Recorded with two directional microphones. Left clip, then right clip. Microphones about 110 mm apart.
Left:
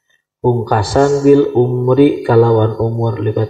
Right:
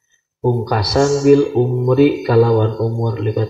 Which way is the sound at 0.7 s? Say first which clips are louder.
Left 3 dB; 30° left (ahead or behind).